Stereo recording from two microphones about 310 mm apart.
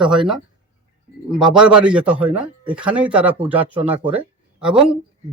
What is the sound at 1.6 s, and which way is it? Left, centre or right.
A man's voice, centre.